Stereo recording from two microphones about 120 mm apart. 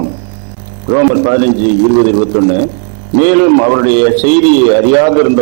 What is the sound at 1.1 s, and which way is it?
A man's voice, 20° right (ahead or behind).